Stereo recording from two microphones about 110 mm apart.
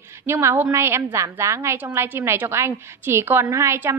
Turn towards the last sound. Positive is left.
turn(degrees=-25)  # may be behind; listen again after turning